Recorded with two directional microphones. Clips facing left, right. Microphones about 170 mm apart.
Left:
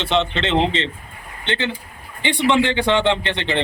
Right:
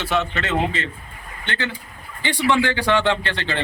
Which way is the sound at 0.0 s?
25° left (ahead or behind).